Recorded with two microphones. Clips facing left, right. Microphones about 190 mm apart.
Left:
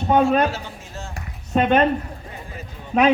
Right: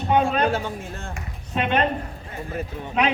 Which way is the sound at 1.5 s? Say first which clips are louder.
Left 6 dB; 40° left (ahead or behind).